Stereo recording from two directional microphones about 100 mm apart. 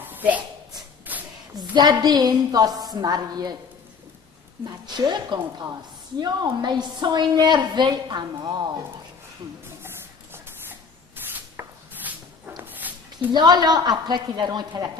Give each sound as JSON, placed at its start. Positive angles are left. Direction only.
{"t": 0.1, "sound": "a sound", "side_deg": -15}
{"t": 1.5, "sound": "a woman's voice", "side_deg": -45}
{"t": 4.6, "sound": "a woman's voice", "side_deg": -50}
{"t": 10.3, "sound": "rub", "side_deg": -25}
{"t": 12.6, "sound": "a sound", "side_deg": -15}
{"t": 13.3, "sound": "a woman's voice", "side_deg": -45}